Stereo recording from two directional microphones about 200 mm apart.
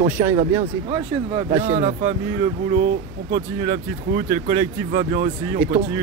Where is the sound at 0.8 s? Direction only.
25° right (ahead or behind).